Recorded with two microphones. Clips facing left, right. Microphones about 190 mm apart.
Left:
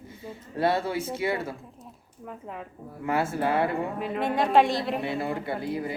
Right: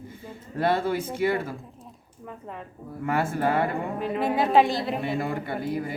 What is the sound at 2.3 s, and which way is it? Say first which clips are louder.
Speech: even; 5° left (ahead or behind).